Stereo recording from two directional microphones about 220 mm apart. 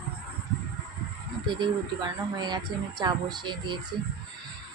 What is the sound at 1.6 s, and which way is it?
A woman's voice, 20° right (ahead or behind).